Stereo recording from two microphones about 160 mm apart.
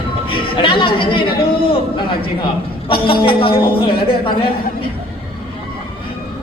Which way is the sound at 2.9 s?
30° left (ahead or behind).